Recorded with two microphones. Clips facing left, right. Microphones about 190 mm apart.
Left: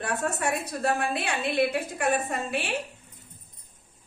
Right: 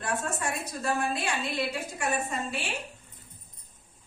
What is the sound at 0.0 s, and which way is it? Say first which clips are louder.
A woman's voice: left 3 dB; 60° left (ahead or behind).